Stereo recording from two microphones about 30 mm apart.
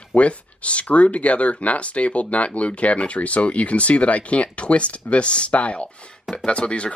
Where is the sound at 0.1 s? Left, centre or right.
Left.